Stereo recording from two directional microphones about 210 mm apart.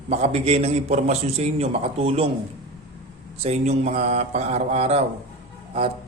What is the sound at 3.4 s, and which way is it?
Mantra, 30° right (ahead or behind).